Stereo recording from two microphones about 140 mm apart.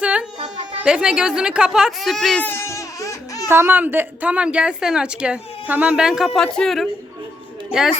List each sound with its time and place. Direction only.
0.0 s a sound: 10° right (ahead or behind)
0.9 s speech: 5° right (ahead or behind)
2.5 s music: 15° left (ahead or behind)
3.5 s a woman's voice: 15° right (ahead or behind)